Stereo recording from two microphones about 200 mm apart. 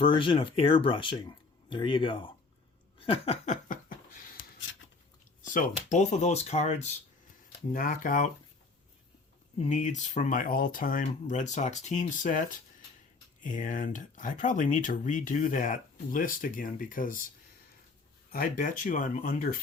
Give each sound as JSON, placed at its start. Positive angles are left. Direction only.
{"t": 0.1, "sound": "speech", "side_deg": 25}
{"t": 3.0, "sound": "laughter", "side_deg": 30}
{"t": 5.4, "sound": "speech", "side_deg": 40}
{"t": 7.7, "sound": "speech", "side_deg": 45}
{"t": 9.6, "sound": "speech", "side_deg": 40}
{"t": 18.3, "sound": "speech", "side_deg": 45}